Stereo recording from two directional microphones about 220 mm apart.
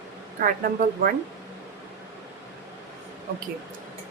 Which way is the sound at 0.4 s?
35° right (ahead or behind).